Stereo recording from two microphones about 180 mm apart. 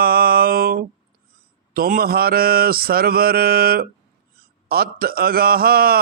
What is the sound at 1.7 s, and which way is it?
A man's voice, 55° right (ahead or behind).